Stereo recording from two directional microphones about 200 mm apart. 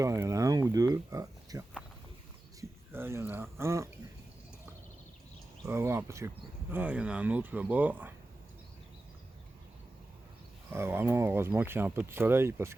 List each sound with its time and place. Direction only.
0.0 s a sound: 15° right (ahead or behind)
2.6 s speech: 10° right (ahead or behind)
5.6 s speech: 15° right (ahead or behind)
10.7 s speech: 10° right (ahead or behind)